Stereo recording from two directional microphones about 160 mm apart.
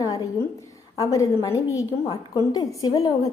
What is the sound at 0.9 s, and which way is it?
A woman's voice, 20° left (ahead or behind).